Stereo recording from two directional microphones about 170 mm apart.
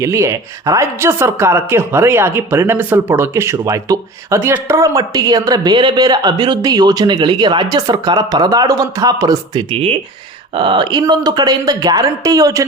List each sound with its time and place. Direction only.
0.0 s speech: 15° right (ahead or behind)